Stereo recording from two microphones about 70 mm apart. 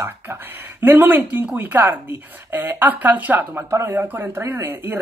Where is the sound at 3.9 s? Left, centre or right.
Right.